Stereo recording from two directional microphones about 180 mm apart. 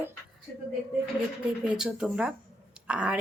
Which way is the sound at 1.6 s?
5° right (ahead or behind).